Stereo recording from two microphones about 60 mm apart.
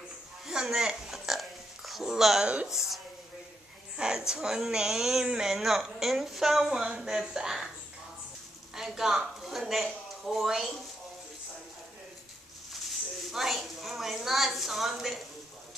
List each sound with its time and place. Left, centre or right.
0.5 s hiccup: centre
2.4 s speech: centre
2.7 s a woman's voice: centre
3.9 s a sound: centre
4.3 s speech: centre
8.7 s a woman's voice: centre
12.8 s speech: centre